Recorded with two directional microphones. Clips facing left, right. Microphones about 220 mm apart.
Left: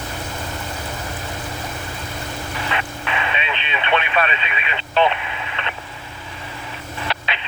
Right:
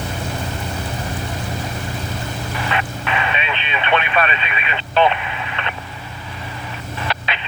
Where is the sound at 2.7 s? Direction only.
50° right (ahead or behind).